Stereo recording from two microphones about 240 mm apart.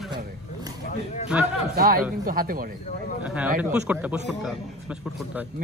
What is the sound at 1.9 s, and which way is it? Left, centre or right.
Speech, right.